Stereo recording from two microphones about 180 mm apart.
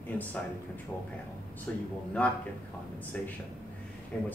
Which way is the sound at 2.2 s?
10° left (ahead or behind).